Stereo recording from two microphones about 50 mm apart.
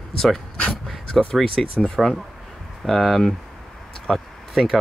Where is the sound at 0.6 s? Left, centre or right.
Centre.